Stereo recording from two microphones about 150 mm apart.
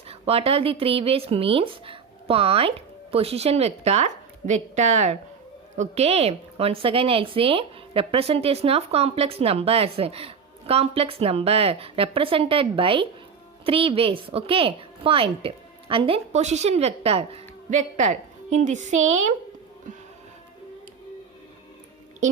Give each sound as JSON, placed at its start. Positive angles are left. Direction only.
{"t": 0.1, "sound": "a woman's voice", "side_deg": -40}